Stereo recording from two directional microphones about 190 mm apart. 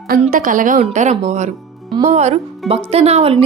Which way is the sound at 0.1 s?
45° right (ahead or behind).